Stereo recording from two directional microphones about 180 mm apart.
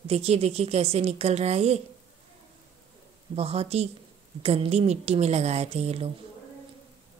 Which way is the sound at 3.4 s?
35° right (ahead or behind).